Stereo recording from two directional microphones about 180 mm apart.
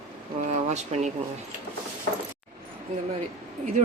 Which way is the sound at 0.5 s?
40° right (ahead or behind).